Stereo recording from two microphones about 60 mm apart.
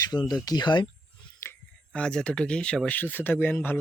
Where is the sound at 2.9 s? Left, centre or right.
Left.